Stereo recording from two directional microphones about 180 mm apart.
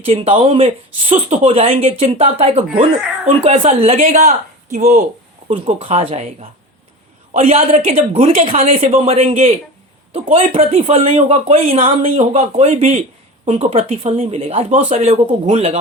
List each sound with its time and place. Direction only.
0.0 s speech: 30° right (ahead or behind)